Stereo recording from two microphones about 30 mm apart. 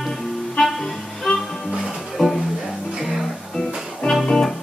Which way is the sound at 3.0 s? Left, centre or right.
Centre.